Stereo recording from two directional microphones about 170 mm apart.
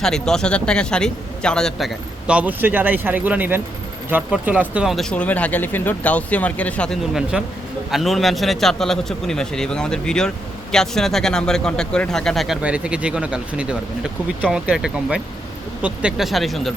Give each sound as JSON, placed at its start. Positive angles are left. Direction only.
{"t": 0.0, "sound": "a man's voice", "side_deg": 5}